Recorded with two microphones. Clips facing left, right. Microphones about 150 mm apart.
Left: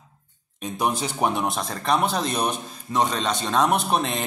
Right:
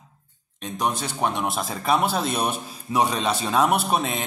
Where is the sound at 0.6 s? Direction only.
10° left (ahead or behind).